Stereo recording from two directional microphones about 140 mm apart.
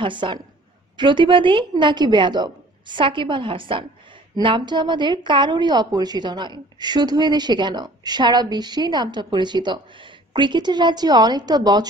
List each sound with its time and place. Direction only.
0.0 s a woman's voice: 35° right (ahead or behind)